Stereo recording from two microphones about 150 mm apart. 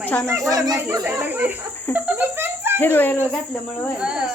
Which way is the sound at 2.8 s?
15° left (ahead or behind).